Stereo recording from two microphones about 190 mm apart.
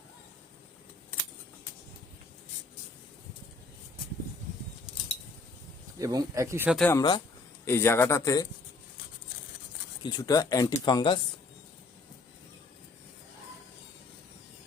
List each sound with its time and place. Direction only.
6.0 s speech: 20° right (ahead or behind)
6.7 s speech: centre (ahead or behind)
6.9 s speech: 20° left (ahead or behind)
10.0 s speech: 20° left (ahead or behind)